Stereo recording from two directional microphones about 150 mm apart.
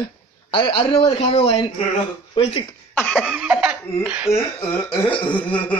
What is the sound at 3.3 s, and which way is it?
Cough, 5° right (ahead or behind).